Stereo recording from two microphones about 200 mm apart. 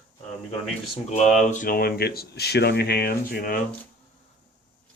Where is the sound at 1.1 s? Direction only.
35° left (ahead or behind).